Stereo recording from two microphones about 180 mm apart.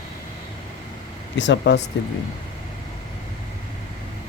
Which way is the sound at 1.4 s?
80° left.